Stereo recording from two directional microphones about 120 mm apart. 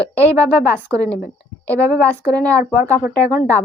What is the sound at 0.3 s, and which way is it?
Speech, 15° left (ahead or behind).